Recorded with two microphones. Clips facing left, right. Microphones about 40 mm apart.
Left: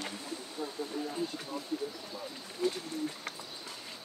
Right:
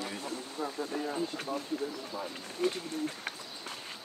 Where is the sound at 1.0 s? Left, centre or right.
Right.